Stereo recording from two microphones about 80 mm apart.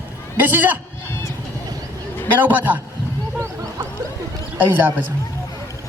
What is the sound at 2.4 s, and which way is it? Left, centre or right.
Speech, right.